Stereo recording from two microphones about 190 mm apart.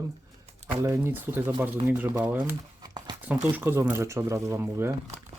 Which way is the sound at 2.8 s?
20° right (ahead or behind).